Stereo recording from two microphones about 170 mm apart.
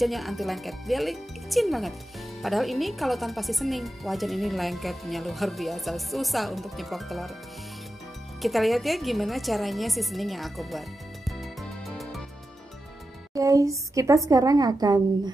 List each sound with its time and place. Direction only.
0.0 s speech: centre (ahead or behind)
8.4 s a woman's voice: centre (ahead or behind)
13.3 s a woman's voice: 20° right (ahead or behind)